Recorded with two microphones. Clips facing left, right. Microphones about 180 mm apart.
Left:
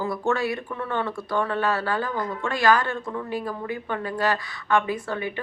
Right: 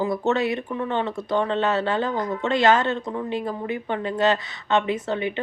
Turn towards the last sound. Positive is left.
turn(degrees=-20)  # may be behind; listen again after turning